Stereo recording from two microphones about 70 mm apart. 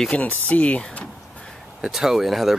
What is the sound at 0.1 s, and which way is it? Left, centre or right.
Speech, left.